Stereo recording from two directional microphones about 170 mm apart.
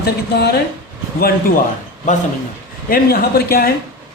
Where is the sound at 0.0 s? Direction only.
70° left (ahead or behind).